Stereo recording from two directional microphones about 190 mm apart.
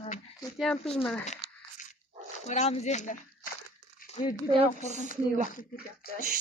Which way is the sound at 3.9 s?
45° left (ahead or behind).